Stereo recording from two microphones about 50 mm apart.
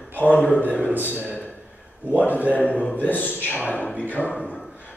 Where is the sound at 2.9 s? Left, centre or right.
Left.